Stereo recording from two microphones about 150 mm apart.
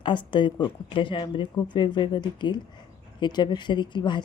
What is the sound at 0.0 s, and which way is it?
Speech, 30° left (ahead or behind).